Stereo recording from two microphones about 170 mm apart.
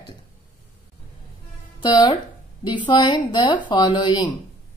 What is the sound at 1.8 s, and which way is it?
Speech, 25° left (ahead or behind).